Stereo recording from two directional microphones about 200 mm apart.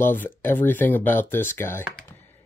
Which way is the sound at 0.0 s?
10° left (ahead or behind).